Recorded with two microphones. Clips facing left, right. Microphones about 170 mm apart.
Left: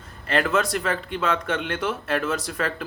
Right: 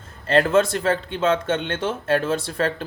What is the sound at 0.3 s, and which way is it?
Speech, 30° right (ahead or behind).